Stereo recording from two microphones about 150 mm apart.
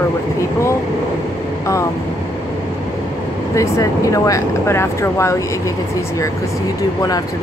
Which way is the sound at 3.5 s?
20° left (ahead or behind).